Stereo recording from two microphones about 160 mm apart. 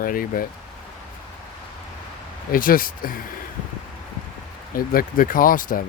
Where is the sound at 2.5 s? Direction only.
60° left (ahead or behind).